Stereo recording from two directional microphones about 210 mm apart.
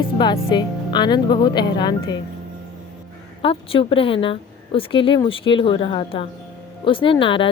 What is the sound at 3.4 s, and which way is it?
A woman's voice, 25° left (ahead or behind).